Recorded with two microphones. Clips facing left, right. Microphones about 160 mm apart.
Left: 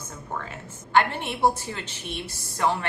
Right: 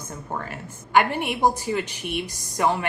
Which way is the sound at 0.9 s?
10° right (ahead or behind).